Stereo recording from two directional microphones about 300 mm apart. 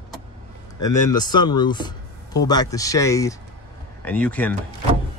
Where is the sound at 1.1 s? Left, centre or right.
Centre.